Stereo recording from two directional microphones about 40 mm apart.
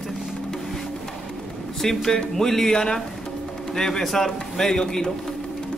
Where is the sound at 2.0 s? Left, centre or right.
Centre.